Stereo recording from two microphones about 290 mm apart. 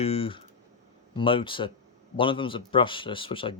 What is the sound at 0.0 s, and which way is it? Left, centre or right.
A man's voice, centre.